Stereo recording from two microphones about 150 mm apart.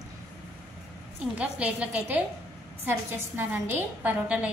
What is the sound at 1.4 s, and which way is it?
A woman's voice, 10° right (ahead or behind).